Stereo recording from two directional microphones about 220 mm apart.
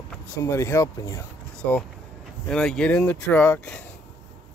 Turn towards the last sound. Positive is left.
turn(degrees=5)  # may be behind; listen again after turning